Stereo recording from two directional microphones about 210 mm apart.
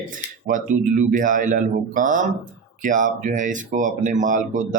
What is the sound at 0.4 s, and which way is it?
Speech, 40° right (ahead or behind).